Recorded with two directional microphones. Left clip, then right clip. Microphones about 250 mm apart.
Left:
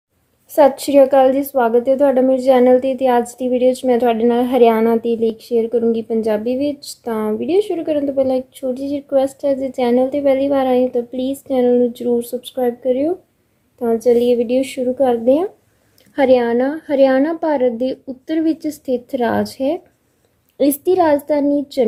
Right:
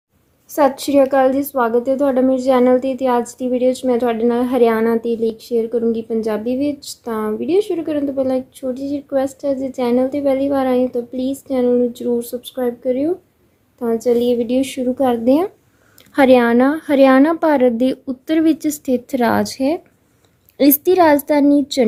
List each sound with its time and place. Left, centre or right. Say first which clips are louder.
0.5 s a woman's voice: left 3 dB; centre; by 21.8 s right